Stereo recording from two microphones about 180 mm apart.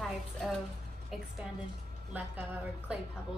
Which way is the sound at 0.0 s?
Centre (ahead or behind).